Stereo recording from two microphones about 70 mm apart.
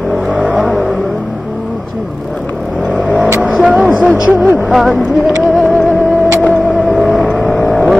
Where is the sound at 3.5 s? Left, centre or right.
Centre.